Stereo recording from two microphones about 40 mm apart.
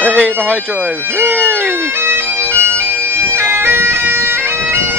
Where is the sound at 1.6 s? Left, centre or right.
Right.